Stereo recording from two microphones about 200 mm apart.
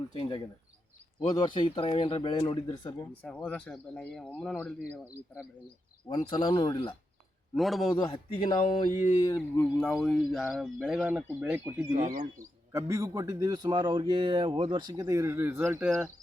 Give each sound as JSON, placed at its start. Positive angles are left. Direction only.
{"t": 0.1, "sound": "speech", "side_deg": 25}
{"t": 3.2, "sound": "speech", "side_deg": 5}
{"t": 5.1, "sound": "speech", "side_deg": -5}
{"t": 6.1, "sound": "speech", "side_deg": 20}
{"t": 7.5, "sound": "speech", "side_deg": 0}
{"t": 7.9, "sound": "speech", "side_deg": 25}
{"t": 9.8, "sound": "speech", "side_deg": 5}
{"t": 11.9, "sound": "speech", "side_deg": -40}
{"t": 12.4, "sound": "a man's voice", "side_deg": -15}